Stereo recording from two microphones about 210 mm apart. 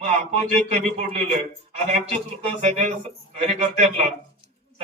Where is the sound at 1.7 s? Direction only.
30° right (ahead or behind).